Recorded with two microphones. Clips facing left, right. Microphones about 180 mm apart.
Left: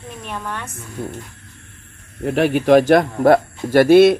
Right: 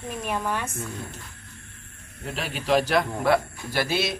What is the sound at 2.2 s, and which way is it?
Speech, 60° left (ahead or behind).